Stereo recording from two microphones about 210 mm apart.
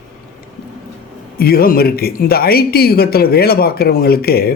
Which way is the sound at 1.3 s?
45° left (ahead or behind).